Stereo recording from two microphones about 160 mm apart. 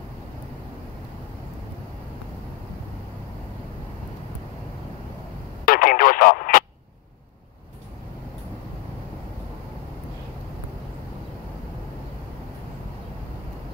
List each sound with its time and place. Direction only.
5.7 s radio: 60° left (ahead or behind)